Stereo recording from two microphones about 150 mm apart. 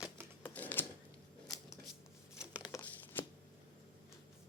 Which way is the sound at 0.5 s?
10° left (ahead or behind).